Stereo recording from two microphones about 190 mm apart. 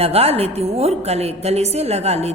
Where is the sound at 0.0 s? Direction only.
30° right (ahead or behind).